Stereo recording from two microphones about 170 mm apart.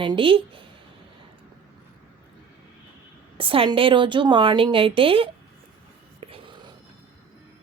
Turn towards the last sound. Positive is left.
turn(degrees=-30)  # may be behind; listen again after turning